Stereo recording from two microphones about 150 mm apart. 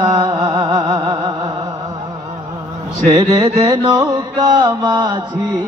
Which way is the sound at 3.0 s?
25° right (ahead or behind).